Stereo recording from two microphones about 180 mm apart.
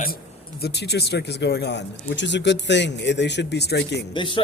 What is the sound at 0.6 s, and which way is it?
Speech, 65° left (ahead or behind).